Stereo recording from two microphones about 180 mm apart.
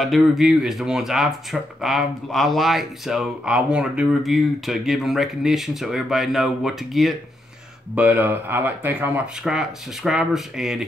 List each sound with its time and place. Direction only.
0.0 s speech: centre (ahead or behind)